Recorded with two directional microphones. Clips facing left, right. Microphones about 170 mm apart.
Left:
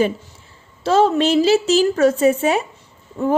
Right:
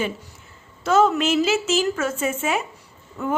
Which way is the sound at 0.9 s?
30° left (ahead or behind).